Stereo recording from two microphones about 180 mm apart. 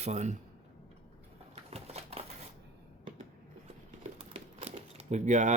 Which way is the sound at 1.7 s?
35° right (ahead or behind).